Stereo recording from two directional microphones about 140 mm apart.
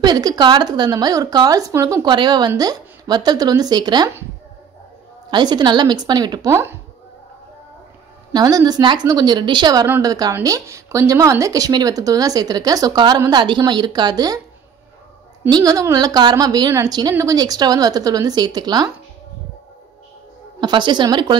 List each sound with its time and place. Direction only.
0.0 s speech: 30° right (ahead or behind)
5.3 s a woman's voice: 30° right (ahead or behind)
6.5 s speech: 15° right (ahead or behind)
8.3 s speech: 25° right (ahead or behind)
15.5 s speech: 25° right (ahead or behind)
20.6 s a woman's voice: 35° right (ahead or behind)